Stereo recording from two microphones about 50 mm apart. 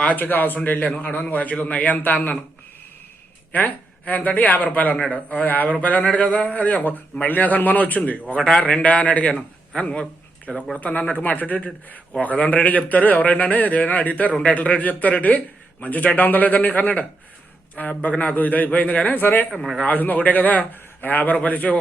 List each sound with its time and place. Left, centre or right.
0.0 s a man's voice: left
1.8 s a man's voice: left
3.5 s a man's voice: left
6.0 s a man's voice: left
8.5 s a man's voice: centre
8.8 s a man's voice: left